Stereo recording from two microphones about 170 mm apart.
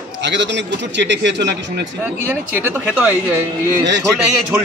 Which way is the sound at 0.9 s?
90° right.